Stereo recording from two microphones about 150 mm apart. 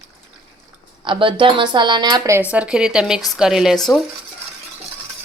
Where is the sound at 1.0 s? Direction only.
35° right (ahead or behind).